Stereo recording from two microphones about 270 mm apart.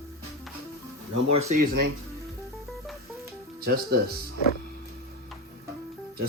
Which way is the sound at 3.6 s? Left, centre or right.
Right.